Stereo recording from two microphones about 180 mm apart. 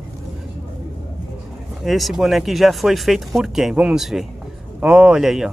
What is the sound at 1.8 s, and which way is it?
Speech, centre (ahead or behind).